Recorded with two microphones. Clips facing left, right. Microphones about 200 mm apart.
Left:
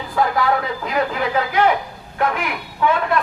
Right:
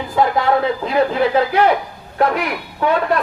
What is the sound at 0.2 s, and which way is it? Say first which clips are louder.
A man's voice: right 3 dB; 25° right (ahead or behind).